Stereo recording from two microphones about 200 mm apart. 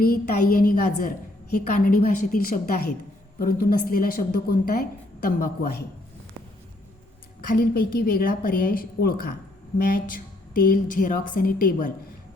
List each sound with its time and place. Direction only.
0.0 s a woman's voice: 45° left (ahead or behind)
7.4 s a woman's voice: 45° left (ahead or behind)